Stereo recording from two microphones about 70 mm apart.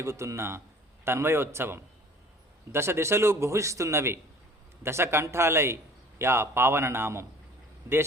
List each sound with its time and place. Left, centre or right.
0.0 s a man's voice: right